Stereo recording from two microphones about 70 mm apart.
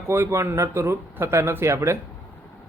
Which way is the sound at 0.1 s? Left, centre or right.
Right.